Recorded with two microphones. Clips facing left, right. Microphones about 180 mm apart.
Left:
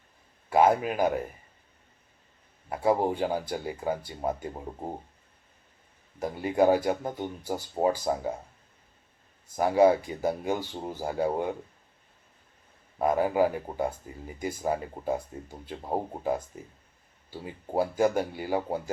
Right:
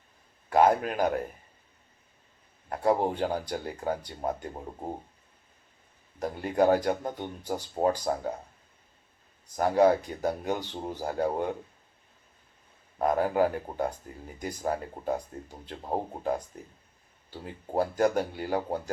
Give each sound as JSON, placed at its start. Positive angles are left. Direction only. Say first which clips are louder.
{"t": 0.5, "sound": "speech", "louder": "even", "side_deg": 5}
{"t": 2.6, "sound": "speech", "louder": "left 1 dB", "side_deg": 5}
{"t": 6.1, "sound": "speech", "louder": "left 1 dB", "side_deg": 5}
{"t": 9.6, "sound": "speech", "louder": "left 1 dB", "side_deg": 5}
{"t": 13.0, "sound": "speech", "louder": "left 1 dB", "side_deg": 5}